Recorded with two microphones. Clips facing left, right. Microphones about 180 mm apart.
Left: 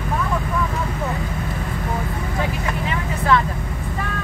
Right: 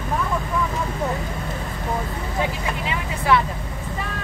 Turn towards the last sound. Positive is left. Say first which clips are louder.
# left 1 dB
turn(degrees=-15)  # may be behind; listen again after turning